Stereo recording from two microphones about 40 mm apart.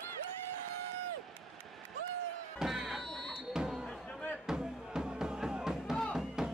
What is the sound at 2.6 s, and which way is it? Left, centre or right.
Music, centre.